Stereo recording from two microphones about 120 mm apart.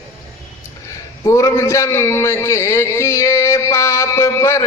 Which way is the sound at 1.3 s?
25° left (ahead or behind).